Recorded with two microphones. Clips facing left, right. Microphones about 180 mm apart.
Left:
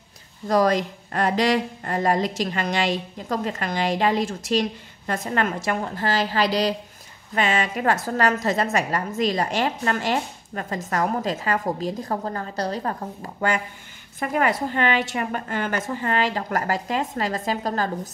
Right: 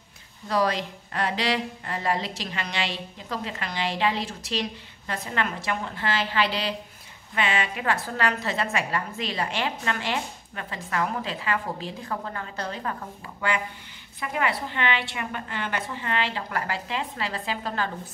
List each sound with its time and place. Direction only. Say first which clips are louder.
0.5 s a woman's voice: left 5 dB; 45° left (ahead or behind)